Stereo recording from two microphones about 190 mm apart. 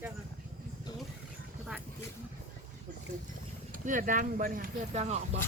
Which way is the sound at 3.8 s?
45° right (ahead or behind).